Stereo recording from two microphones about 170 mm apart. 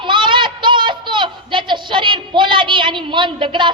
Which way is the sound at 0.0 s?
30° right (ahead or behind).